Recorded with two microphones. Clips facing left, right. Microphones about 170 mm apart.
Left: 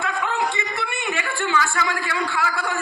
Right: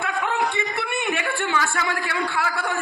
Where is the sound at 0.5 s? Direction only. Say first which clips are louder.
Right 2 dB; 60° right (ahead or behind).